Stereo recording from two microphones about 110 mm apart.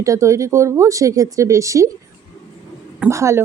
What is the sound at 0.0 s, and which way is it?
A woman's voice, 30° right (ahead or behind).